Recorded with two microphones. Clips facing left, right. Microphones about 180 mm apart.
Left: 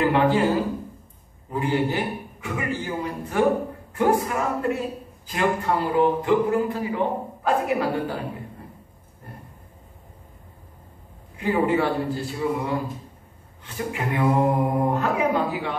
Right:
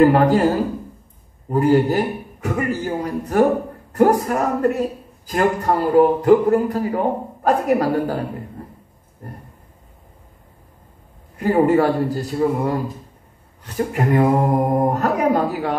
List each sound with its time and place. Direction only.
0.0 s a man's voice: 40° right (ahead or behind)
11.3 s a man's voice: 40° right (ahead or behind)
13.7 s a man's voice: 45° right (ahead or behind)